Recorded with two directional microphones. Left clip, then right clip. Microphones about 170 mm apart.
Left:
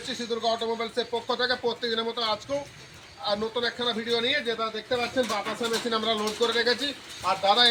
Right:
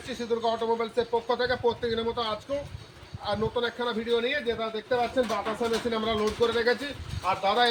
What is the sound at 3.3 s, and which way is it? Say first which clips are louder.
Speech: left 1 dB; 15° right (ahead or behind).